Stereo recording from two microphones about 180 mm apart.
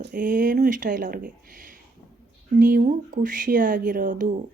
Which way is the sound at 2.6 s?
55° right (ahead or behind).